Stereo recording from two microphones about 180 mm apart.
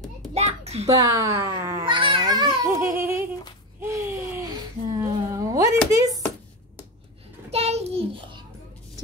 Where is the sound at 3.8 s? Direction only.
15° right (ahead or behind).